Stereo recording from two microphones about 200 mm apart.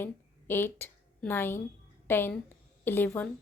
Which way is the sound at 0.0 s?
10° left (ahead or behind).